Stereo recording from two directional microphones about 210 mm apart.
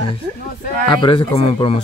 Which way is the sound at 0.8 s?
20° left (ahead or behind).